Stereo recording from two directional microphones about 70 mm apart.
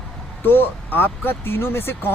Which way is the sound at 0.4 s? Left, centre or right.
Left.